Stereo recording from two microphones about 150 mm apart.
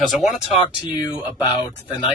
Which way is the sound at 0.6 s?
30° left (ahead or behind).